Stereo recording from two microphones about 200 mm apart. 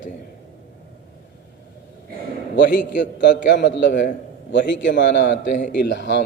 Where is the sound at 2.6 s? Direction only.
60° left (ahead or behind).